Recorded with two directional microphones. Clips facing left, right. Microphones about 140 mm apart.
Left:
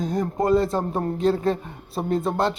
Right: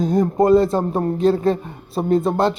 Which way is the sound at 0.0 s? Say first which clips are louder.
Right 7 dB; 30° right (ahead or behind).